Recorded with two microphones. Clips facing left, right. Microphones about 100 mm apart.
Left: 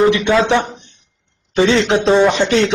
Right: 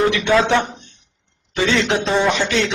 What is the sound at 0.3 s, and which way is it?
Speech, 20° left (ahead or behind).